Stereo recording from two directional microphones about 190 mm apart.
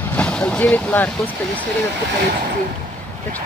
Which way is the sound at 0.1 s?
5° left (ahead or behind).